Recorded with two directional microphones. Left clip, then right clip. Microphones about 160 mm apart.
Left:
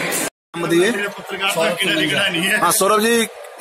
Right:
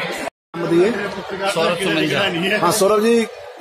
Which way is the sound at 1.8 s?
40° right (ahead or behind).